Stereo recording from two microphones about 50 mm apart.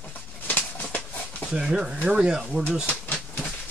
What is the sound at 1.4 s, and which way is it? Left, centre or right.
Speech, centre.